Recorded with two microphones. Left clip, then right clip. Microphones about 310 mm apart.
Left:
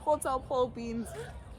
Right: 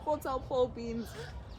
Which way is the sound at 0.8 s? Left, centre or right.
Centre.